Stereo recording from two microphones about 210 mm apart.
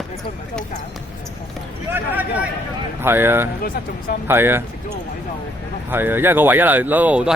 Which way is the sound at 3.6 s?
45° left (ahead or behind).